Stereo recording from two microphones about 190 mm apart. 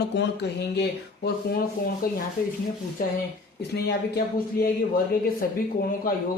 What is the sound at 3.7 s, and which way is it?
Speech, 60° left (ahead or behind).